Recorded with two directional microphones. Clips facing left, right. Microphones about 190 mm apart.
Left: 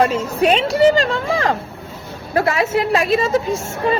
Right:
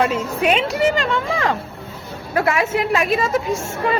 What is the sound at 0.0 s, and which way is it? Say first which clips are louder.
A woman's voice: left 3 dB; 35° left (ahead or behind).